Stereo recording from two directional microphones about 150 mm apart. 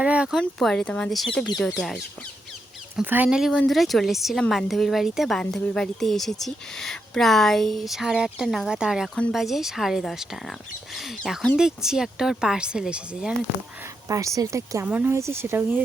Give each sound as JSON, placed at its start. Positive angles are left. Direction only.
{"t": 0.0, "sound": "speech", "side_deg": -10}
{"t": 2.9, "sound": "speech", "side_deg": -10}
{"t": 14.1, "sound": "a woman's voice", "side_deg": -20}